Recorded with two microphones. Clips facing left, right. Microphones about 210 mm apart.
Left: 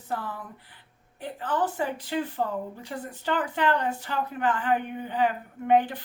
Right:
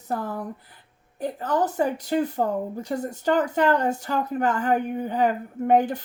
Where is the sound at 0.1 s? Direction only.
40° right (ahead or behind).